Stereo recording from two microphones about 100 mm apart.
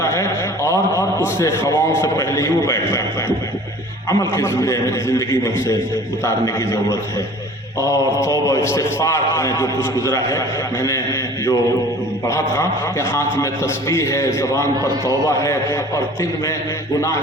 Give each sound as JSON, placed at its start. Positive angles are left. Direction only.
{"t": 0.0, "sound": "a man's voice", "side_deg": 30}
{"t": 7.8, "sound": "a man's voice", "side_deg": 30}
{"t": 12.3, "sound": "a man's voice", "side_deg": 25}